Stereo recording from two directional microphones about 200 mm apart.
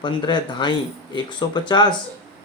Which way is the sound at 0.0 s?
20° left (ahead or behind).